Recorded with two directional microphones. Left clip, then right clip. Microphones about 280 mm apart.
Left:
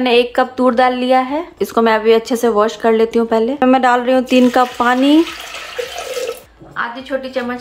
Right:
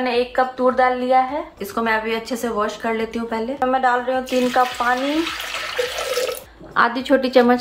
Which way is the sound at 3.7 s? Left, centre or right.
Left.